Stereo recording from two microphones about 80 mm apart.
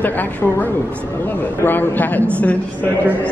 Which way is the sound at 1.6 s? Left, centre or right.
Left.